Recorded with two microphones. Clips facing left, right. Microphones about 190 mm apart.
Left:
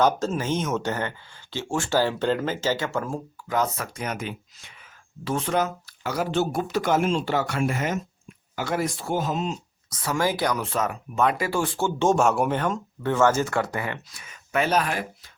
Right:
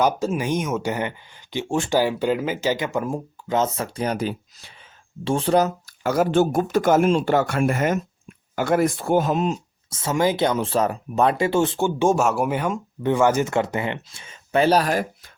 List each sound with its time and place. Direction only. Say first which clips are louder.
0.0 s speech: right 1 dB; 10° right (ahead or behind); by 9.6 s 60° right (ahead or behind)
9.9 s speech: right 4 dB; 25° right (ahead or behind)